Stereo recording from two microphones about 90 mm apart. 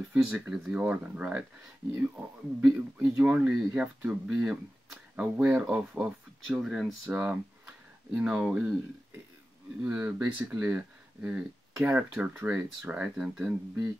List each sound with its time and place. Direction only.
0.1 s speech: 10° right (ahead or behind)
6.4 s speech: 5° right (ahead or behind)
7.1 s speech: 15° right (ahead or behind)
10.1 s speech: 15° right (ahead or behind)